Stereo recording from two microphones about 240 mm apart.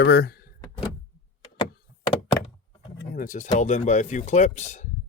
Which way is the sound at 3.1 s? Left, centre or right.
Left.